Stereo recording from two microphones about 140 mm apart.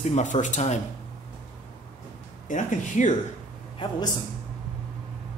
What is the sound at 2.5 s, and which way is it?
Speech, 65° left (ahead or behind).